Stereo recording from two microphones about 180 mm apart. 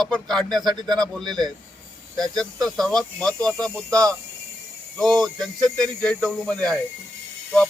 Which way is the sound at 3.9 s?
20° right (ahead or behind).